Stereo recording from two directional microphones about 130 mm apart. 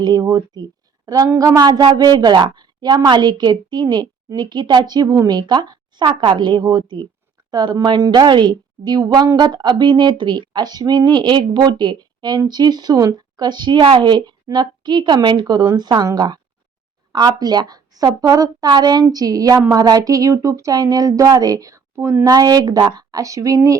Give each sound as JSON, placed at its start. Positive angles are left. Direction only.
{"t": 0.0, "sound": "a woman's voice", "side_deg": -30}